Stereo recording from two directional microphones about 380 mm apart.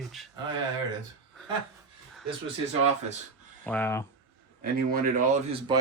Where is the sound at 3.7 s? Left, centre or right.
Centre.